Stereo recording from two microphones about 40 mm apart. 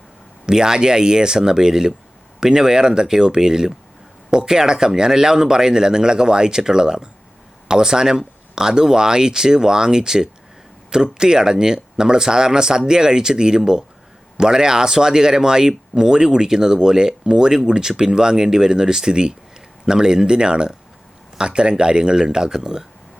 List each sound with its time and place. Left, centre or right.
0.4 s speech: centre